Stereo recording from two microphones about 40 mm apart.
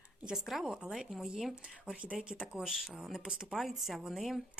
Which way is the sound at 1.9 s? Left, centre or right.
Right.